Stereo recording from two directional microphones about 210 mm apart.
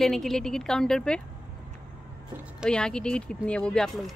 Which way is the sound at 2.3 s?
5° right (ahead or behind).